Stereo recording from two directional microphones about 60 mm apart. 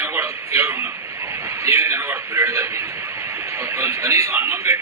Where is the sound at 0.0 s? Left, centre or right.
Right.